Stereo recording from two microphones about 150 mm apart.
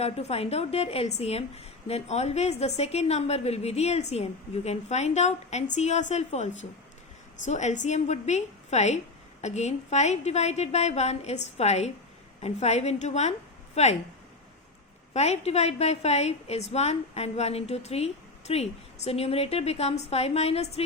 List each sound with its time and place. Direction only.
0.0 s a woman's voice: 45° left (ahead or behind)
15.1 s a woman's voice: 45° left (ahead or behind)